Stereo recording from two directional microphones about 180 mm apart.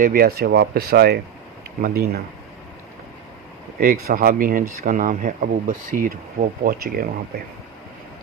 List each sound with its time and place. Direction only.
0.0 s speech: 55° right (ahead or behind)
3.8 s speech: 55° right (ahead or behind)